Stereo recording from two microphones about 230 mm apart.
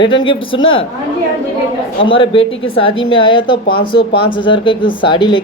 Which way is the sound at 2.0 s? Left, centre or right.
Left.